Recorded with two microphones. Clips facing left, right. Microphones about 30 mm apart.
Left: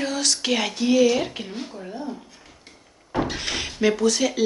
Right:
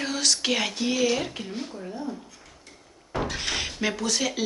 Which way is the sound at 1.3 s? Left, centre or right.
Centre.